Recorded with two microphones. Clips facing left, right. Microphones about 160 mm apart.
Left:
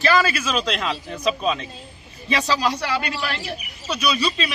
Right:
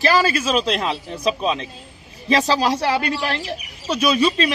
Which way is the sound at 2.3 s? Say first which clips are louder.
Right 4 dB; 45° right (ahead or behind).